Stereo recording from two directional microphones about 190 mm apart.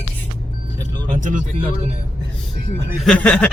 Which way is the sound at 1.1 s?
40° right (ahead or behind).